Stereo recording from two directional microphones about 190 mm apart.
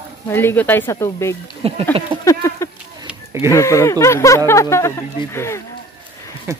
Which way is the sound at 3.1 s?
15° right (ahead or behind).